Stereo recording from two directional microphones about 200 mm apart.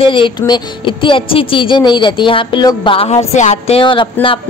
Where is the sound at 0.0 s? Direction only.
25° left (ahead or behind).